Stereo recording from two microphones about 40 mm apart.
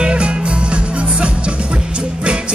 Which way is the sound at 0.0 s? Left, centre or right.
Right.